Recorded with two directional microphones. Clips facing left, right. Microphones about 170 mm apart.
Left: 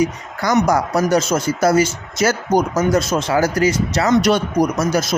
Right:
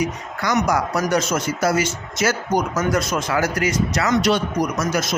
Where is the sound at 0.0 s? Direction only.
35° left (ahead or behind).